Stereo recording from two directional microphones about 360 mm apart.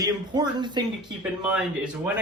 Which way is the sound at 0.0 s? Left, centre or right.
Centre.